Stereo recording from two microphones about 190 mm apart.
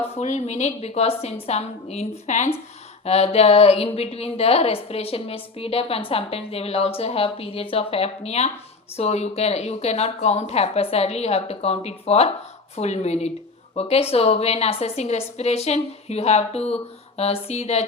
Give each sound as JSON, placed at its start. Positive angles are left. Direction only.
{"t": 0.0, "sound": "a woman's voice", "side_deg": 35}